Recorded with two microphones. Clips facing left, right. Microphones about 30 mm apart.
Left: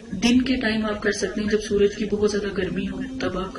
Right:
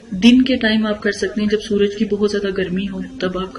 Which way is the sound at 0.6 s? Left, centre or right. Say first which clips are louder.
Right 7 dB; right.